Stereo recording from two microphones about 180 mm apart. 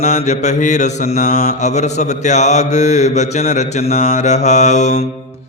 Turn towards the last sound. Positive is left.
turn(degrees=40)  # may be behind; listen again after turning